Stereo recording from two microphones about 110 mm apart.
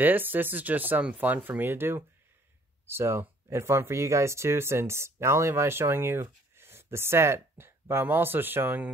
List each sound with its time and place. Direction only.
0.0 s speech: 15° right (ahead or behind)